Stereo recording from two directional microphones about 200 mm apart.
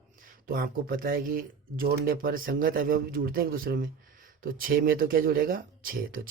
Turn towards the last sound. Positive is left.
turn(degrees=-45)  # may be behind; listen again after turning